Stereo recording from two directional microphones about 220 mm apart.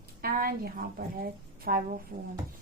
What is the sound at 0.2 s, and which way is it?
A woman's voice, 40° right (ahead or behind).